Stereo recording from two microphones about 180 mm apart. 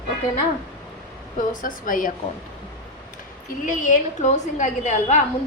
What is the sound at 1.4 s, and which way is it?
Speech, 50° left (ahead or behind).